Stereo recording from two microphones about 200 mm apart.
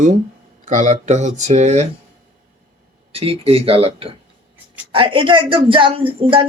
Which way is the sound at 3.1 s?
30° right (ahead or behind).